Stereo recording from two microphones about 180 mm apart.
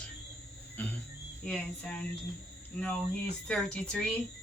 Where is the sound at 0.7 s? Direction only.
10° left (ahead or behind).